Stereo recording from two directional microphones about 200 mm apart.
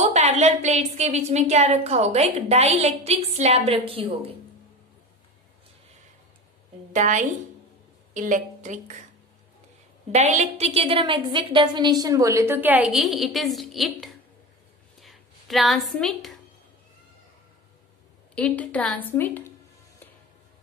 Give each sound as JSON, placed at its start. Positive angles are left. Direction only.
{"t": 0.0, "sound": "a woman's voice", "side_deg": -35}
{"t": 6.9, "sound": "a woman's voice", "side_deg": -35}
{"t": 10.1, "sound": "a woman's voice", "side_deg": -35}
{"t": 15.0, "sound": "a sound", "side_deg": 0}
{"t": 18.3, "sound": "a woman's voice", "side_deg": 5}